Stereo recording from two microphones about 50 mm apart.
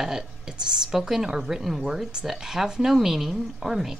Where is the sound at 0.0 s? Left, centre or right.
Centre.